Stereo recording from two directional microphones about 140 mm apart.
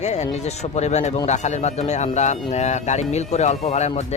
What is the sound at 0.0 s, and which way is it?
Speech, 55° left (ahead or behind).